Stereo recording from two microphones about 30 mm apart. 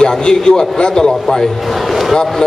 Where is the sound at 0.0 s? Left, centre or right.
Left.